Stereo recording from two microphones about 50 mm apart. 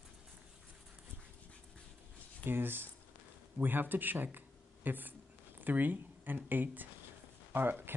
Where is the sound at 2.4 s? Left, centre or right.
Right.